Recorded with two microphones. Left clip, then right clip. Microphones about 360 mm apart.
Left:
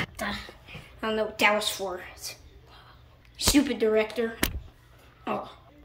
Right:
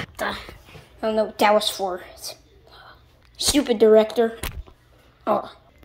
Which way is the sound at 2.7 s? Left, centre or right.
Centre.